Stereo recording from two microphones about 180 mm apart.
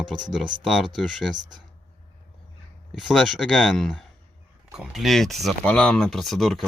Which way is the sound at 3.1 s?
Centre (ahead or behind).